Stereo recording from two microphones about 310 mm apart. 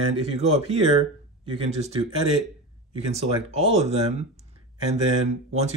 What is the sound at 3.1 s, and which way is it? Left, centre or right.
Speech, centre.